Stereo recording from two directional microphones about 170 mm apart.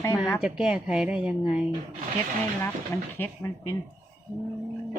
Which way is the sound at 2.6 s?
10° left (ahead or behind).